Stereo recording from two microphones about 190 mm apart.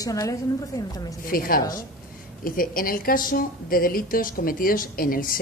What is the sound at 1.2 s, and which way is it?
Speech, 50° left (ahead or behind).